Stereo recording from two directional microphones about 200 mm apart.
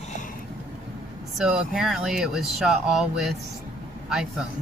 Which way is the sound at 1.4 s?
5° right (ahead or behind).